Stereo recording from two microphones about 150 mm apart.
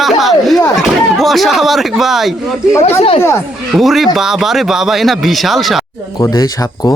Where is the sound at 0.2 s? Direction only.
Centre (ahead or behind).